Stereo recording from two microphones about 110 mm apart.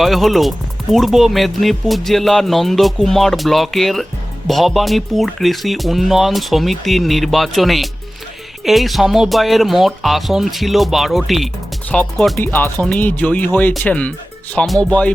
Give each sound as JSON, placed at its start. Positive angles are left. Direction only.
{"t": 0.0, "sound": "speech", "side_deg": 0}
{"t": 12.4, "sound": "speech", "side_deg": 20}